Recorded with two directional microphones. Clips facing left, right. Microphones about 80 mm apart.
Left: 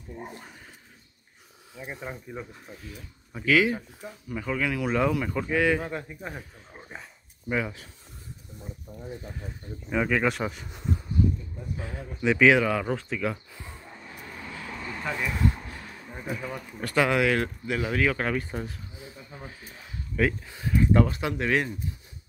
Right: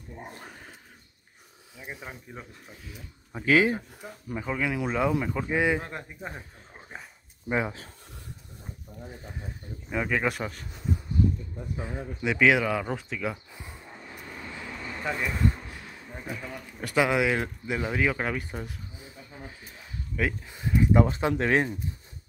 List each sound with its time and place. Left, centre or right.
0.4 s a sound: right
1.8 s speech: centre
3.4 s speech: right
4.4 s speech: centre
5.5 s speech: centre
5.8 s speech: centre
7.4 s speech: right
9.8 s speech: centre
12.2 s speech: centre
15.0 s speech: centre
16.3 s speech: centre
16.8 s speech: centre
21.0 s speech: right